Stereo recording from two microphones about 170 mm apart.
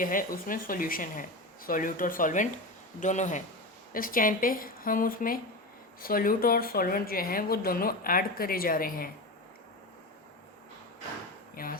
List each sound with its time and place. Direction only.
0.0 s speech: 55° left (ahead or behind)
11.5 s speech: 60° left (ahead or behind)